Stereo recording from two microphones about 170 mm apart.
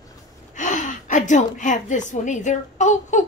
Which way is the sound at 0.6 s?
45° left (ahead or behind).